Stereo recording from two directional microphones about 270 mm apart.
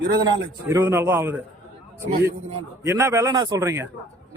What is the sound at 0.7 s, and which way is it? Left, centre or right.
Speech, centre.